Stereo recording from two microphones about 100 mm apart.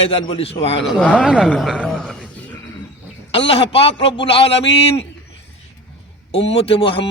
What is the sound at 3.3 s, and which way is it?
Speech, 70° left (ahead or behind).